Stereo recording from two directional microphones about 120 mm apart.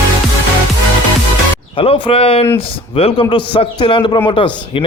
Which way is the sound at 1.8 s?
50° left (ahead or behind).